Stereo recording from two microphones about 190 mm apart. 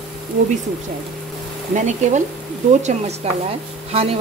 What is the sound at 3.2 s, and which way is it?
Speech, 35° right (ahead or behind).